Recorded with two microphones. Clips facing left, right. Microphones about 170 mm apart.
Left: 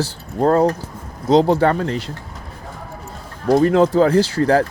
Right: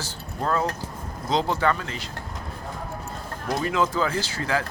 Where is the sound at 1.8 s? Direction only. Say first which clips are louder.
Left 12 dB; 60° left (ahead or behind).